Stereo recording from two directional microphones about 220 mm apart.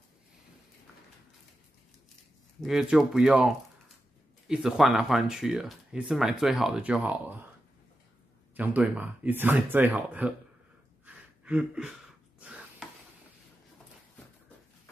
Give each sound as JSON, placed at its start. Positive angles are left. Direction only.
{"t": 2.6, "sound": "speech", "side_deg": 0}
{"t": 8.5, "sound": "speech", "side_deg": -10}
{"t": 11.4, "sound": "speech", "side_deg": -5}
{"t": 12.4, "sound": "a sound", "side_deg": -5}